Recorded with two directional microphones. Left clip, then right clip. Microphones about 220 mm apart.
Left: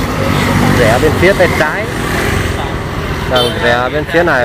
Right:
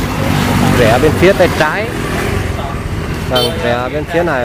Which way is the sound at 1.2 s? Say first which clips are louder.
Left 1 dB; 20° right (ahead or behind).